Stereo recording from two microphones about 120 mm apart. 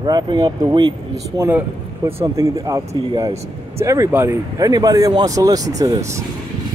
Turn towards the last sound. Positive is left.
turn(degrees=-30)  # may be behind; listen again after turning